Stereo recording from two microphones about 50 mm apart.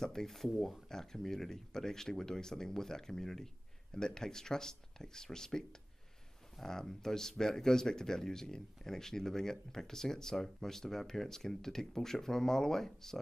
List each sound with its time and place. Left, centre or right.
0.0 s speech: centre